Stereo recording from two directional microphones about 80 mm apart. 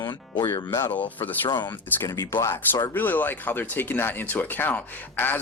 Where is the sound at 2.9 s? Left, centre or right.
Left.